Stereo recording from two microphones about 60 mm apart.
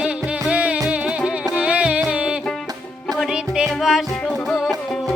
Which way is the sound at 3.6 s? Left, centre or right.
Centre.